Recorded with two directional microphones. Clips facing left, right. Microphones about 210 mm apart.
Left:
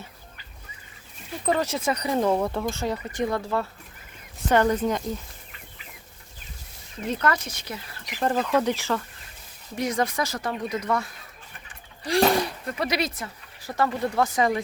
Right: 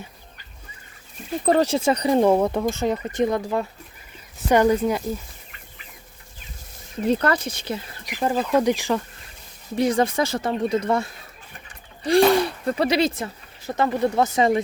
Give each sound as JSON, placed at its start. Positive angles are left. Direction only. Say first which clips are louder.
{"t": 1.5, "sound": "speech", "louder": "right 6 dB", "side_deg": -30}
{"t": 7.1, "sound": "speech", "louder": "right 5 dB", "side_deg": -30}
{"t": 8.0, "sound": "speech", "louder": "right 1 dB", "side_deg": -10}
{"t": 9.7, "sound": "speech", "louder": "right 6 dB", "side_deg": -30}
{"t": 12.6, "sound": "speech", "louder": "right 7 dB", "side_deg": -30}